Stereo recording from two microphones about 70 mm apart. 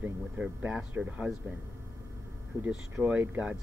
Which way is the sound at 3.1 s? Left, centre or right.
Centre.